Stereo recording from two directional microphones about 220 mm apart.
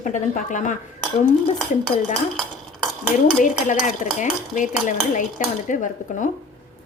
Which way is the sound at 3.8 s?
35° left (ahead or behind).